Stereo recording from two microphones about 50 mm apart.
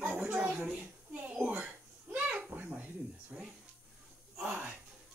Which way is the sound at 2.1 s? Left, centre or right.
Right.